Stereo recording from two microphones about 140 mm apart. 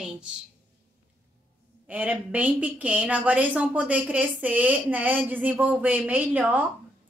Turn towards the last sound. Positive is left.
turn(degrees=-10)  # may be behind; listen again after turning